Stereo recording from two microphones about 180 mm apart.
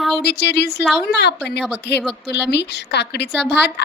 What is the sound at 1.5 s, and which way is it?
Speech, 5° left (ahead or behind).